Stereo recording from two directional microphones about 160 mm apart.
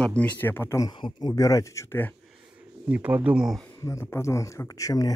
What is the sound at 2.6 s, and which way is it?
Speech, 10° right (ahead or behind).